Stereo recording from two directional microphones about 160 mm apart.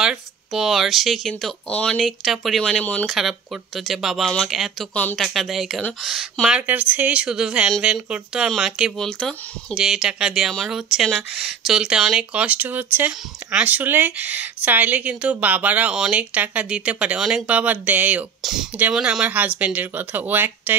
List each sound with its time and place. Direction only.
0.0 s speech: 5° right (ahead or behind)